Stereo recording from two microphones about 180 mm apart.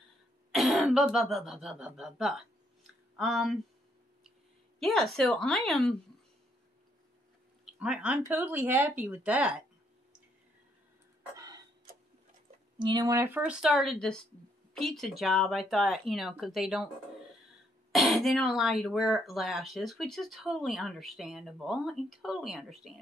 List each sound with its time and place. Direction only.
0.5 s speech: centre (ahead or behind)
4.7 s speech: centre (ahead or behind)
7.8 s a woman's voice: 5° right (ahead or behind)
11.3 s tick-tock: 20° right (ahead or behind)
12.8 s speech: 20° right (ahead or behind); by 16.9 s centre (ahead or behind)
17.9 s speech: centre (ahead or behind)